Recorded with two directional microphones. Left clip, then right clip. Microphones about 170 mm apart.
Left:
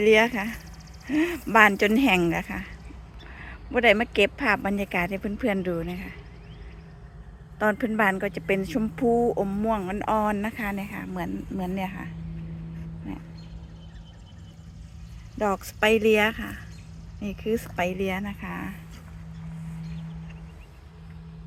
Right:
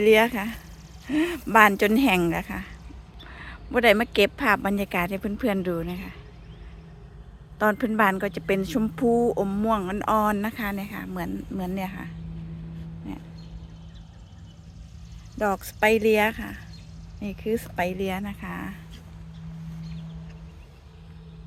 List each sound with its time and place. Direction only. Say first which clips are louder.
0.0 s a woman's voice: right 1 dB; 10° right (ahead or behind)
7.6 s a woman's voice: right 2 dB; 15° right (ahead or behind)
15.4 s speech: right 1 dB; 5° right (ahead or behind)